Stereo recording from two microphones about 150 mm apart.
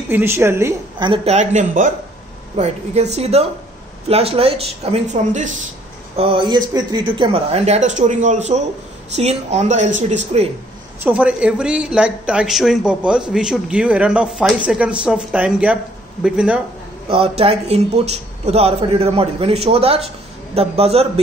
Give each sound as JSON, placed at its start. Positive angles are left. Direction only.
{"t": 0.1, "sound": "speech", "side_deg": -15}
{"t": 0.9, "sound": "a woman's voice", "side_deg": -30}
{"t": 1.2, "sound": "speech", "side_deg": -50}
{"t": 4.9, "sound": "speech", "side_deg": -55}
{"t": 6.1, "sound": "speech", "side_deg": -35}
{"t": 11.1, "sound": "speech", "side_deg": -10}
{"t": 17.1, "sound": "speech", "side_deg": -40}